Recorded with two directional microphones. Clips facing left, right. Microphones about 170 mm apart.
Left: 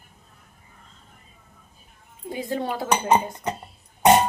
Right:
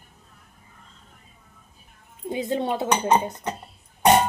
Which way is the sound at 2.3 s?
20° right (ahead or behind).